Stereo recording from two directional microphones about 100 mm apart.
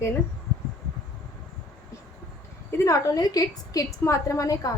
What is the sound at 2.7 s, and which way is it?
A woman's voice, 35° left (ahead or behind).